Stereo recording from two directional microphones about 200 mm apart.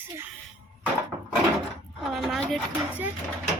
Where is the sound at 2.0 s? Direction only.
Centre (ahead or behind).